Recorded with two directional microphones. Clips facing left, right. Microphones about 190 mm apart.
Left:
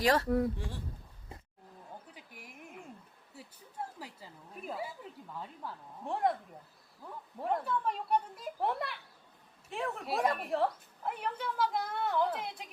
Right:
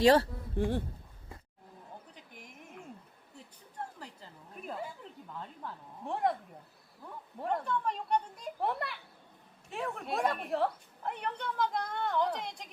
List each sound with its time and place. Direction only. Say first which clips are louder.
0.0 s speech: right 5 dB; 30° right (ahead or behind)
0.5 s speech: right 12 dB; 55° right (ahead or behind)
2.1 s a sound: even; 5° left (ahead or behind)
4.0 s a sound: left 1 dB; 5° left (ahead or behind)
5.4 s a woman's voice: even; 5° left (ahead or behind)
7.3 s a woman's voice: even; centre (ahead or behind)